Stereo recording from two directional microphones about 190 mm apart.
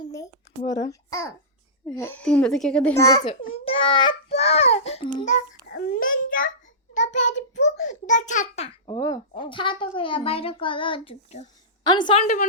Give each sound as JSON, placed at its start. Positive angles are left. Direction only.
{"t": 0.0, "sound": "a sound", "side_deg": 20}
{"t": 2.0, "sound": "a child's voice", "side_deg": 10}
{"t": 3.2, "sound": "a child's voice", "side_deg": 30}
{"t": 5.6, "sound": "a child's voice", "side_deg": 50}
{"t": 9.0, "sound": "a child's voice", "side_deg": 20}
{"t": 12.2, "sound": "a child's voice", "side_deg": 40}